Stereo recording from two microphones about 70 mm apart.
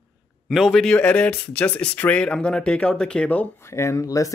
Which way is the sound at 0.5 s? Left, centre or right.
Centre.